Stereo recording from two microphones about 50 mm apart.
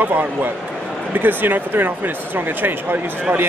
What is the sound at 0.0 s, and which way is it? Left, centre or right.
Speech, right.